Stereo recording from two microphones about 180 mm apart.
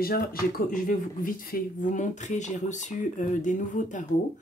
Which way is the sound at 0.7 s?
50° left (ahead or behind).